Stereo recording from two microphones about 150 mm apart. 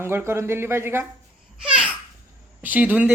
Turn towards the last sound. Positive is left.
turn(degrees=-10)  # may be behind; listen again after turning